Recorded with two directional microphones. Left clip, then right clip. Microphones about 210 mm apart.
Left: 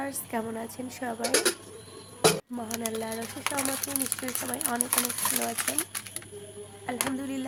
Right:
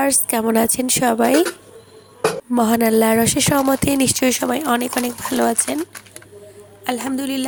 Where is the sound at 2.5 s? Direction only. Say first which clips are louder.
Right 18 dB; 50° right (ahead or behind).